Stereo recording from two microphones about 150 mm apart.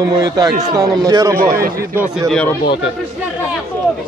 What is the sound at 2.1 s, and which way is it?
Speech, 5° left (ahead or behind).